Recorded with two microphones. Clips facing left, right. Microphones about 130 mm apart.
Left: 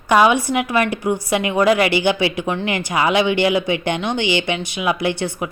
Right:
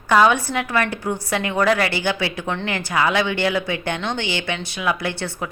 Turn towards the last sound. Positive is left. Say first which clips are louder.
# left 5 dB
turn(degrees=15)  # may be behind; listen again after turning